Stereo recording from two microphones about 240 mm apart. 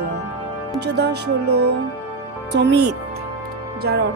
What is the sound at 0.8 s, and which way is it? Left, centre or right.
Speech, right.